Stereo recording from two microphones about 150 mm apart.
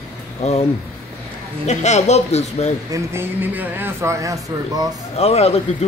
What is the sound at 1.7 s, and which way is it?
Speech, 50° left (ahead or behind).